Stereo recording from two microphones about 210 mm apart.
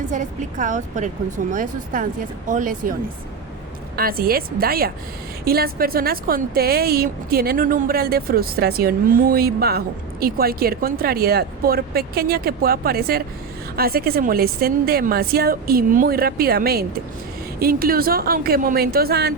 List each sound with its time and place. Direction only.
0.6 s speech: 35° right (ahead or behind)
3.9 s a woman's voice: 45° right (ahead or behind)